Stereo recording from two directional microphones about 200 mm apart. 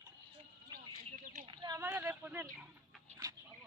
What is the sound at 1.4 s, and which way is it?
Speech, 20° right (ahead or behind).